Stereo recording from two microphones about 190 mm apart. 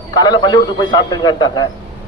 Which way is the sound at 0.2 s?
20° left (ahead or behind).